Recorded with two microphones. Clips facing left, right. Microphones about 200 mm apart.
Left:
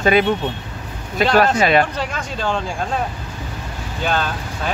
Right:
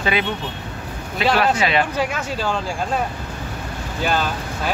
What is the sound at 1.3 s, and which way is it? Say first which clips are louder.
Speech: left 4 dB; 45° left (ahead or behind).